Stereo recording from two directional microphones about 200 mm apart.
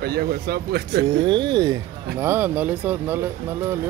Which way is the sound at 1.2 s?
25° right (ahead or behind).